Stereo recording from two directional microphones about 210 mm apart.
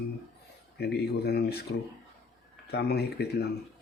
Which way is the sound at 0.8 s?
50° left (ahead or behind).